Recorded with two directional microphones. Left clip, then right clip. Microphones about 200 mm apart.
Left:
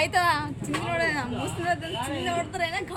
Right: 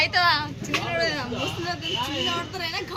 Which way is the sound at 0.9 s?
60° left (ahead or behind).